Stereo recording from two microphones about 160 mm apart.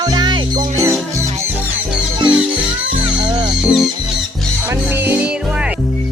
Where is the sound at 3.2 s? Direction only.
25° right (ahead or behind).